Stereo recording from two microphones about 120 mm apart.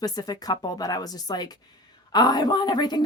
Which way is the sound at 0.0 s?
30° left (ahead or behind).